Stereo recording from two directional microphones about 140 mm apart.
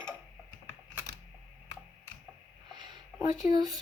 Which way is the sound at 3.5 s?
30° right (ahead or behind).